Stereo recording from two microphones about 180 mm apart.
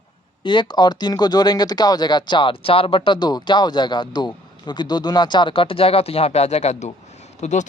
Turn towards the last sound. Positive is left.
turn(degrees=40)  # may be behind; listen again after turning